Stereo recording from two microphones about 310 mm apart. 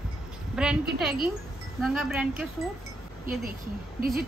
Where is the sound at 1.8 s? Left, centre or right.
Centre.